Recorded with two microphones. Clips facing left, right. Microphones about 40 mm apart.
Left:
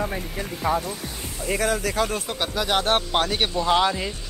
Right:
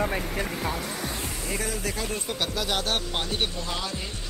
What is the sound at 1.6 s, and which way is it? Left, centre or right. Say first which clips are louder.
Speech: left 10 dB; left.